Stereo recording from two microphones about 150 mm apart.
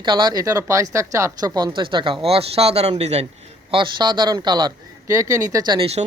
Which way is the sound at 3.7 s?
30° right (ahead or behind).